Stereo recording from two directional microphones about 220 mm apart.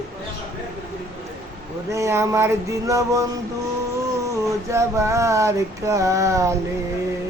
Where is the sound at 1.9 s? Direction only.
15° right (ahead or behind).